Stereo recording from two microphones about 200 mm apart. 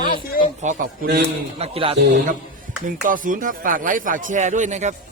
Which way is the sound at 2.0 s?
45° right (ahead or behind).